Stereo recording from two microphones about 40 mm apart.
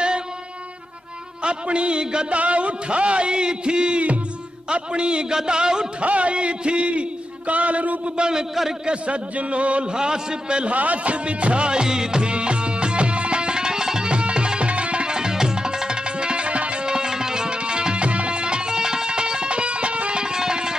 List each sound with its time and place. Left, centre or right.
1.4 s a man's voice: right
6.0 s a man's voice: right
8.2 s a man's voice: centre
8.8 s a man's voice: right
9.9 s a man's voice: centre
10.7 s music: right; by 20.7 s centre